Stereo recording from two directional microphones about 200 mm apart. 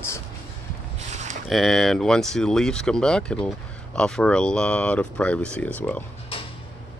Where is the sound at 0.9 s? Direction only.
35° right (ahead or behind).